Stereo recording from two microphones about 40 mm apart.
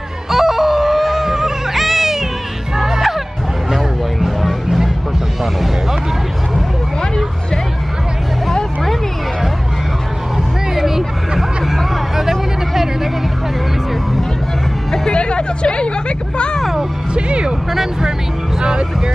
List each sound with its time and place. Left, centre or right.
0.3 s music: centre
3.7 s a sound: centre
5.4 s music: centre
10.7 s hubbub: centre
15.1 s a sound: left
17.1 s music: right
18.6 s music: centre